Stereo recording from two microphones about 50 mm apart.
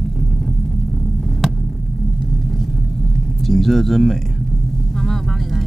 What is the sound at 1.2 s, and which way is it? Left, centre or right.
Throbbing, centre.